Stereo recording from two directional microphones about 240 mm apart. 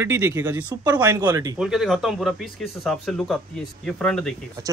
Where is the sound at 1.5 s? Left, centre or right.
Centre.